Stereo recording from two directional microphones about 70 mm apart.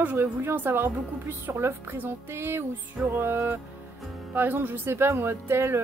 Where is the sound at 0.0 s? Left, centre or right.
Right.